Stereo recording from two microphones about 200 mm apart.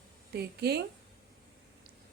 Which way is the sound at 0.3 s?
55° right (ahead or behind).